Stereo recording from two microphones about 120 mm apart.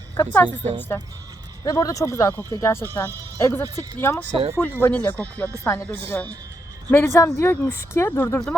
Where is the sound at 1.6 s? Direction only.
30° left (ahead or behind).